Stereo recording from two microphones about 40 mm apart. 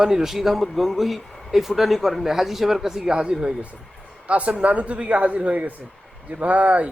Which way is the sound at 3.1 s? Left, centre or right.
Right.